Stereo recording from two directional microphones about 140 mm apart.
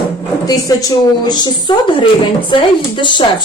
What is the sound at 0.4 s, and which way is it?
A woman's voice, 25° left (ahead or behind).